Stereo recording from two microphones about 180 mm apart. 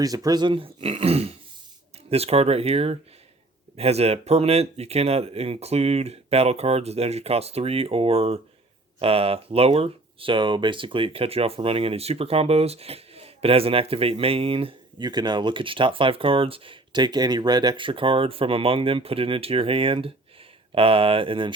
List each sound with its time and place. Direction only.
0.0 s speech: 20° right (ahead or behind)